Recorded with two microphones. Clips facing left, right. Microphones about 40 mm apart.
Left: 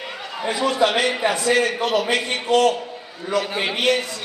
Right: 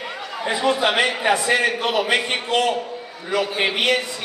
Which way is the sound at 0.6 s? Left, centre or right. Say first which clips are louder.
Even; right.